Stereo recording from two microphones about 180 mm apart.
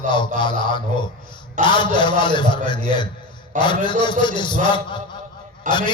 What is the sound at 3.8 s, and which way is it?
Speech, 25° left (ahead or behind).